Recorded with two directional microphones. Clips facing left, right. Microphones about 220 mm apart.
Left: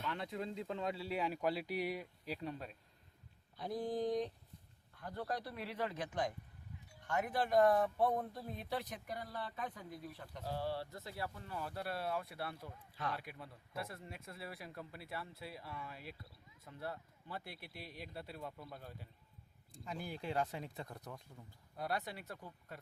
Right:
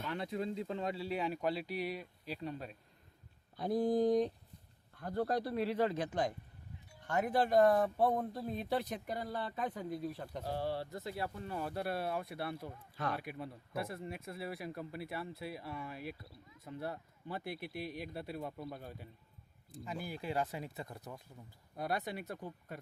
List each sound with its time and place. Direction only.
0.1 s speech: 5° right (ahead or behind); by 2.4 s 15° left (ahead or behind)
2.4 s speech: 5° right (ahead or behind)
3.6 s mantra: 50° right (ahead or behind)
4.9 s a man's voice: 45° right (ahead or behind)
10.8 s speech: 20° right (ahead or behind)
19.7 s speech: 5° right (ahead or behind)
21.8 s speech: 15° right (ahead or behind)